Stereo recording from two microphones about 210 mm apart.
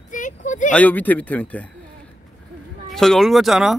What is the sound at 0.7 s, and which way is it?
Speech, 10° left (ahead or behind).